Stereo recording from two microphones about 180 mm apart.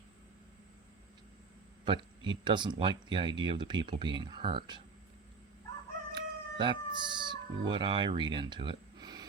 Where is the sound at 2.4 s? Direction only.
25° right (ahead or behind).